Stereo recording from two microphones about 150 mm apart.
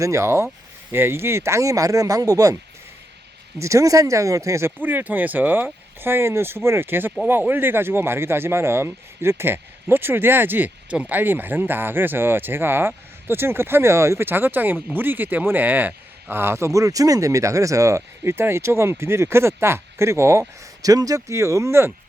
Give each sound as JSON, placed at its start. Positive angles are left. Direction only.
{"t": 0.0, "sound": "speech", "side_deg": -20}
{"t": 3.6, "sound": "speech", "side_deg": -20}